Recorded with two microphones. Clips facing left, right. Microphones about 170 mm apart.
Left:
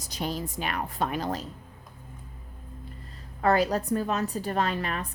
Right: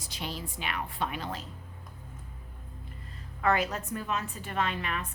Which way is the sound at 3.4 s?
35° left (ahead or behind).